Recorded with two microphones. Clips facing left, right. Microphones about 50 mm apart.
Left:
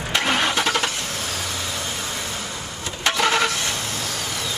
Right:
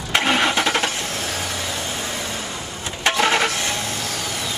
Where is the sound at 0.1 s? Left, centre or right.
Right.